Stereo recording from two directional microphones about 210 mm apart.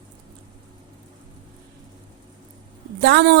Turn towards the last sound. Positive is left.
turn(degrees=-55)  # may be behind; listen again after turning